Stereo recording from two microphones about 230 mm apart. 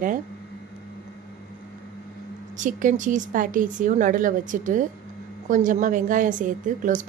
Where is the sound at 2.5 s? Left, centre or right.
Right.